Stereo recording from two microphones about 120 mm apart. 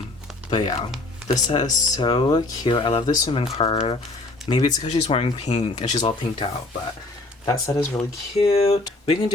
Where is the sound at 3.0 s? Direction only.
30° left (ahead or behind).